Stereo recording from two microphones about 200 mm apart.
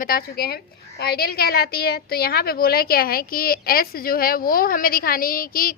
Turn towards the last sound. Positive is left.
turn(degrees=45)  # may be behind; listen again after turning